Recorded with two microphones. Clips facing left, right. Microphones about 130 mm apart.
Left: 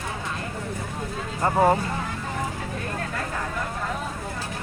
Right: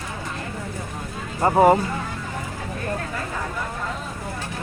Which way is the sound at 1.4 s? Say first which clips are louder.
Right 4 dB; 20° right (ahead or behind).